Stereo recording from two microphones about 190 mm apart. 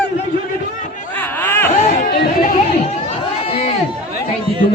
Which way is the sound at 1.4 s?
10° left (ahead or behind).